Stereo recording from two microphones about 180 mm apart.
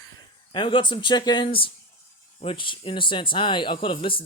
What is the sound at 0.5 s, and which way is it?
Speech, 25° left (ahead or behind).